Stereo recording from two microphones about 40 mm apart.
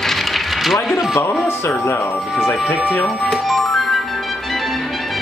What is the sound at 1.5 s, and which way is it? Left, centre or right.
Speech, left.